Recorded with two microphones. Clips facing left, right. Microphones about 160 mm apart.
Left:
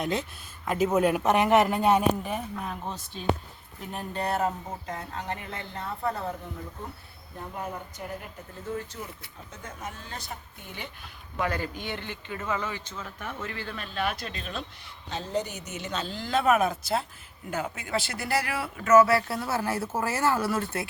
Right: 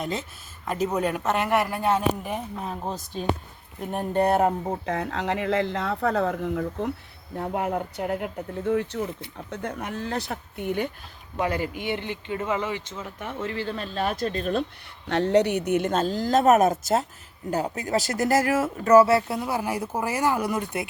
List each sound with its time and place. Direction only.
0.0 s speech: centre (ahead or behind); by 2.0 s 15° left (ahead or behind)
2.2 s speech: 15° right (ahead or behind)
3.1 s speech: 45° right (ahead or behind)
3.8 s speech: 55° right (ahead or behind)
4.9 s speech: 75° right (ahead or behind)
7.3 s speech: 70° right (ahead or behind)
11.3 s speech: 20° right (ahead or behind); by 14.6 s 45° right (ahead or behind)
15.0 s speech: 75° right (ahead or behind); by 20.9 s 15° right (ahead or behind)